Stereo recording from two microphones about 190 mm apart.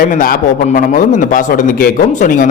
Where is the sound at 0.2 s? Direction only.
45° left (ahead or behind).